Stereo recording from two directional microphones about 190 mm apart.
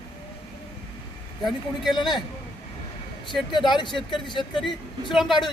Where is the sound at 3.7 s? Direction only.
25° left (ahead or behind).